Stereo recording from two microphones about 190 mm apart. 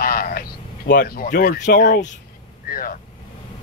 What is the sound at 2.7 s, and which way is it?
Vehicle, 50° left (ahead or behind).